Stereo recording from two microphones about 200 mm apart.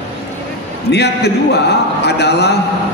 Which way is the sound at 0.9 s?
55° left (ahead or behind).